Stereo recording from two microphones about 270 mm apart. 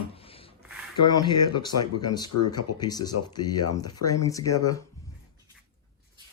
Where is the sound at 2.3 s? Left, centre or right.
Left.